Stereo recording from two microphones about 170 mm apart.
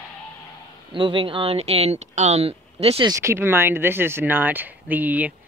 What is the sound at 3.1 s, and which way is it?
Speech, 15° right (ahead or behind).